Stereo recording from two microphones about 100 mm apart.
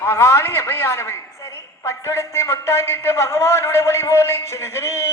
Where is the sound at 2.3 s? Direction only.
25° left (ahead or behind).